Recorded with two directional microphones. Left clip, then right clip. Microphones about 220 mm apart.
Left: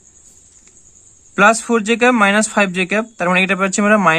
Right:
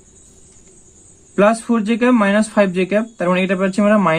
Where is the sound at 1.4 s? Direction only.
30° left (ahead or behind).